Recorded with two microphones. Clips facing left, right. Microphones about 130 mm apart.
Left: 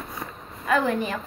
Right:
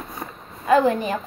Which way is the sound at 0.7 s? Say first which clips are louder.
Right 5 dB; 30° right (ahead or behind).